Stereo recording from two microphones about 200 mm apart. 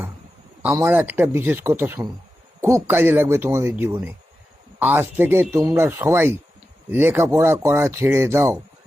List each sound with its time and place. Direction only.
0.6 s speech: 10° right (ahead or behind)